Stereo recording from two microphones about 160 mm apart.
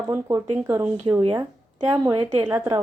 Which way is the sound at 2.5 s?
15° right (ahead or behind).